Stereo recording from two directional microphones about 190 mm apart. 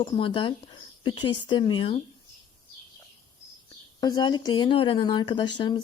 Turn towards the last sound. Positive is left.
turn(degrees=20)  # may be behind; listen again after turning